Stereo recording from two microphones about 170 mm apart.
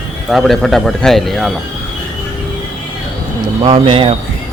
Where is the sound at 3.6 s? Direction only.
30° right (ahead or behind).